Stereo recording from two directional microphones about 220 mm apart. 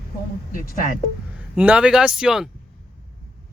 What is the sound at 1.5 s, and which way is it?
Speech, 5° right (ahead or behind).